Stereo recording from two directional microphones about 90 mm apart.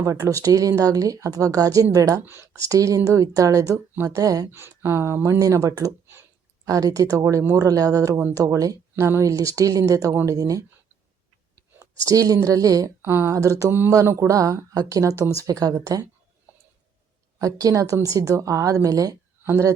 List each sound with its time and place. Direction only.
0.0 s a woman's voice: 35° right (ahead or behind)
2.2 s speech: 25° right (ahead or behind)
2.6 s a woman's voice: 40° right (ahead or behind)
4.5 s a woman's voice: 25° right (ahead or behind)
12.0 s a woman's voice: 40° right (ahead or behind)
13.0 s speech: 25° right (ahead or behind)
13.3 s a woman's voice: 40° right (ahead or behind)
17.4 s a woman's voice: 40° right (ahead or behind)